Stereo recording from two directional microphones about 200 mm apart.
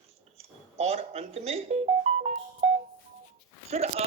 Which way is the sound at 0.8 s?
30° right (ahead or behind).